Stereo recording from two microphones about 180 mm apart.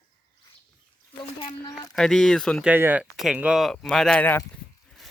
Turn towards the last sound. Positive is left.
turn(degrees=10)  # may be behind; listen again after turning